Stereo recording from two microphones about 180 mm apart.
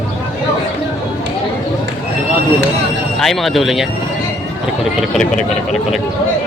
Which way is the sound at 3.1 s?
Centre (ahead or behind).